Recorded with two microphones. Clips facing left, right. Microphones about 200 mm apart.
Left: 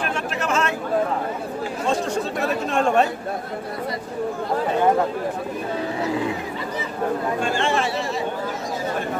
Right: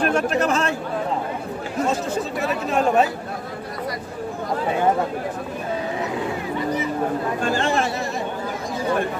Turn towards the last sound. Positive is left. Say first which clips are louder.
# right 1 dB
turn(degrees=-40)  # may be behind; listen again after turning